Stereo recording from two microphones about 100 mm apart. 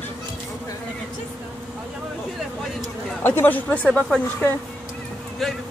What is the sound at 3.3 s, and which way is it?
A woman's voice, 20° left (ahead or behind).